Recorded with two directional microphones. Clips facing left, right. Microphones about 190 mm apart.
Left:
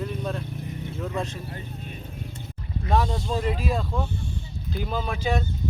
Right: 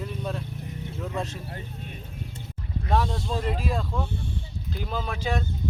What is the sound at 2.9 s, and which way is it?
Speech, centre (ahead or behind).